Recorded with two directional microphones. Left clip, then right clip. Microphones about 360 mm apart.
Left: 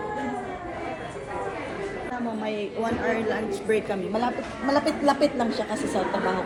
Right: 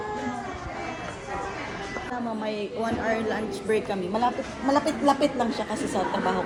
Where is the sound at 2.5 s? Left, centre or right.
Centre.